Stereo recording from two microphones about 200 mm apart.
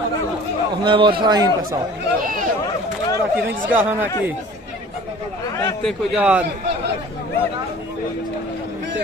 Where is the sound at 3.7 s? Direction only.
10° right (ahead or behind).